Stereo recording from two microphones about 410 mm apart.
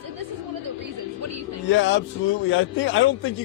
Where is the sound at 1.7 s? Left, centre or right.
Left.